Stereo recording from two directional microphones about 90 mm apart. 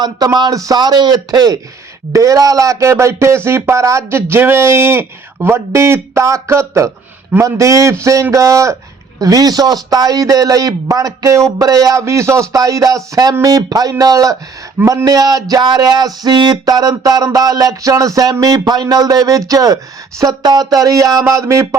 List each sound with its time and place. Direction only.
0.3 s a man's voice: 45° right (ahead or behind)
2.1 s a man's voice: 40° right (ahead or behind)